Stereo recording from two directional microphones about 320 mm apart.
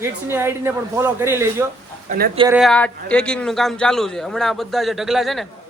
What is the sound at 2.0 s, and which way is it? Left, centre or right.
Speech, right.